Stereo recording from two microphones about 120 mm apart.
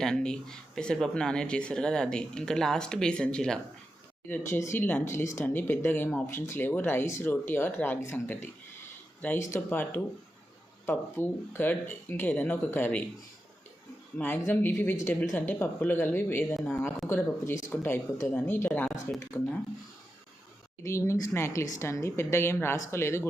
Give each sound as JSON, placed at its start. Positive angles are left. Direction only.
{"t": 0.0, "sound": "speech", "side_deg": 5}
{"t": 4.3, "sound": "speech", "side_deg": 20}
{"t": 14.2, "sound": "speech", "side_deg": 20}
{"t": 20.8, "sound": "speech", "side_deg": 25}